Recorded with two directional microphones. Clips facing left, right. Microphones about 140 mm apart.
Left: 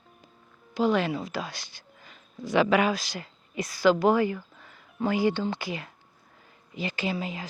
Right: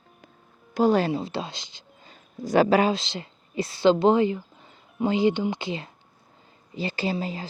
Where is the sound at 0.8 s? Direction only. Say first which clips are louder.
Right 4 dB; 35° right (ahead or behind); by 2.1 s 20° right (ahead or behind).